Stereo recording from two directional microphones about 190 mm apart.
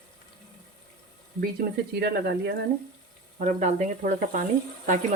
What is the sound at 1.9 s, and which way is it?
Speech, 60° right (ahead or behind).